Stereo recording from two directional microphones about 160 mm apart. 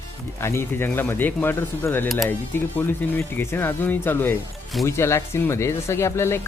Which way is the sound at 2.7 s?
15° left (ahead or behind).